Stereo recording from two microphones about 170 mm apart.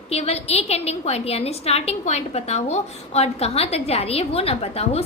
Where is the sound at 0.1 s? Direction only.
40° left (ahead or behind).